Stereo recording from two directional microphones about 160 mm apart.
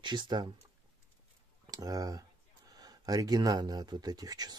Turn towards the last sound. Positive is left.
turn(degrees=-25)  # may be behind; listen again after turning